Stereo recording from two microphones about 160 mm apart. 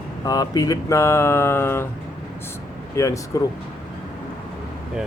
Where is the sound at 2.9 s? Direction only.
20° left (ahead or behind).